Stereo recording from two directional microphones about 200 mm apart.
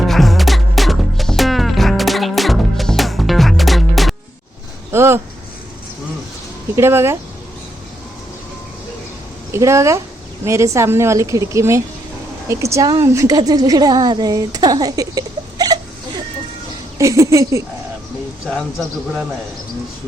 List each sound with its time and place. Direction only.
0.0 s music: centre (ahead or behind)
4.9 s a sound: 10° right (ahead or behind)
6.7 s a woman's voice: 15° right (ahead or behind)
9.5 s a woman's voice: 15° right (ahead or behind)